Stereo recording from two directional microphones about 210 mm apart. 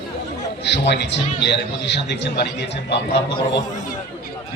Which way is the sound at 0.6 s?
55° left (ahead or behind).